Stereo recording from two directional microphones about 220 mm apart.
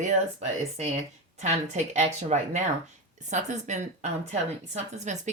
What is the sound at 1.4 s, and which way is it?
A woman's voice, 30° right (ahead or behind).